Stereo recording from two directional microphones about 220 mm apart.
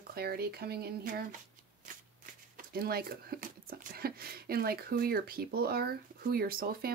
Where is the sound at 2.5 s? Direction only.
45° right (ahead or behind).